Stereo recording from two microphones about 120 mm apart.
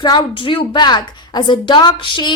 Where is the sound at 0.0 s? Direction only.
40° left (ahead or behind).